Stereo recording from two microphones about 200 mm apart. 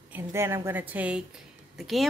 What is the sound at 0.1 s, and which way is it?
A woman's voice, 10° right (ahead or behind).